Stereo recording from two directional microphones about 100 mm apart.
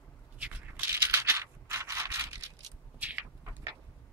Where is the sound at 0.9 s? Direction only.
25° right (ahead or behind).